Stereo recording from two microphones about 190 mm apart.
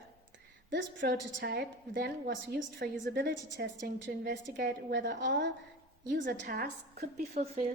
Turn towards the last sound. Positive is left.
turn(degrees=-50)  # may be behind; listen again after turning